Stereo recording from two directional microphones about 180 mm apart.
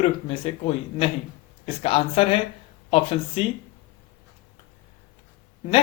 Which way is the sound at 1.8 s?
30° left (ahead or behind).